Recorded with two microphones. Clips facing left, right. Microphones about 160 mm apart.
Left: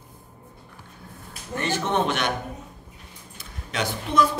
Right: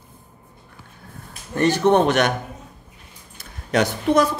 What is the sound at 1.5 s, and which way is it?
Speech, 40° right (ahead or behind).